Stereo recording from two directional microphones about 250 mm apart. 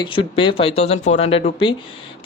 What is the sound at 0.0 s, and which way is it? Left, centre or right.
Speech, centre.